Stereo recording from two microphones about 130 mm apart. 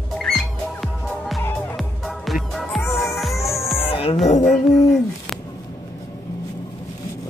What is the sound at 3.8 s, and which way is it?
Music, 50° left (ahead or behind).